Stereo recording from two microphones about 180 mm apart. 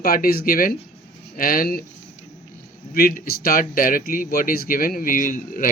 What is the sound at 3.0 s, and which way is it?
Speech, 55° left (ahead or behind).